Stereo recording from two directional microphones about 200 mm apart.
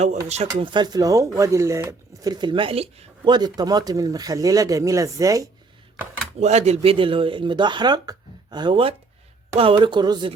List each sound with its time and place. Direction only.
0.6 s speech: 20° right (ahead or behind)
6.4 s speech: 35° right (ahead or behind)